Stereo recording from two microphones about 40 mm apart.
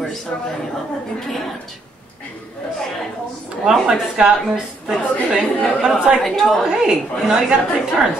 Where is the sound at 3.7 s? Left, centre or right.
Right.